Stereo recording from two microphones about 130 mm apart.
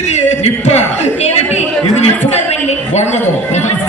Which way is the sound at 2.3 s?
60° left (ahead or behind).